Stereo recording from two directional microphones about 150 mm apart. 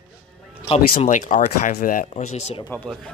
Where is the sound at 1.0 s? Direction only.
60° left (ahead or behind).